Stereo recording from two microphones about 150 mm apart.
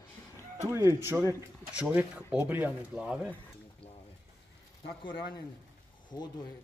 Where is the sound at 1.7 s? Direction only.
10° right (ahead or behind).